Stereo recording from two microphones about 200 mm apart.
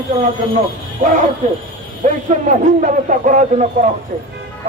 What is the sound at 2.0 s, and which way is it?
A man's voice, 40° right (ahead or behind).